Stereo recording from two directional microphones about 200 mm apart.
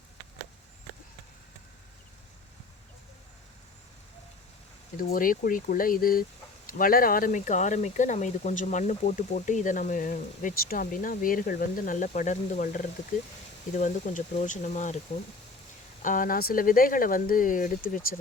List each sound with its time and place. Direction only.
5.1 s speech: 45° left (ahead or behind)
16.0 s speech: 45° left (ahead or behind)